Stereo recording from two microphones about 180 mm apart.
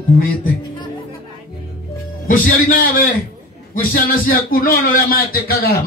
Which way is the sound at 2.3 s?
50° left (ahead or behind).